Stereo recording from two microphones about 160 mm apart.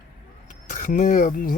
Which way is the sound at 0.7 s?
55° left (ahead or behind).